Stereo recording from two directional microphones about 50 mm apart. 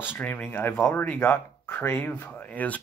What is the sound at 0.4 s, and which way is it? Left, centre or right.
Speech, left.